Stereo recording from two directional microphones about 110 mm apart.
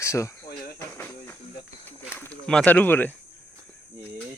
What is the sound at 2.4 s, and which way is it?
Speech, 10° left (ahead or behind).